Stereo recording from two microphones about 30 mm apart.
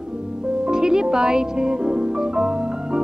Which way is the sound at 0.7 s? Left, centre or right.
Right.